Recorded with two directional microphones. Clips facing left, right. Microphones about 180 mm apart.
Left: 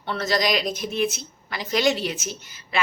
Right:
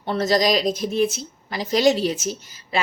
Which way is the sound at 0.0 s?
40° right (ahead or behind).